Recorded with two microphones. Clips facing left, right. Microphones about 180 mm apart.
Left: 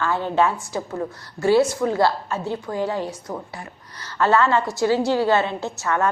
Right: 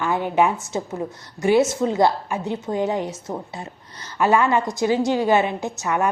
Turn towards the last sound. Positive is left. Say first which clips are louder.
# even
turn(degrees=-15)  # may be behind; listen again after turning